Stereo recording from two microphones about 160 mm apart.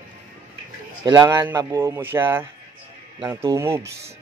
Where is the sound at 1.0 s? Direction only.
25° right (ahead or behind).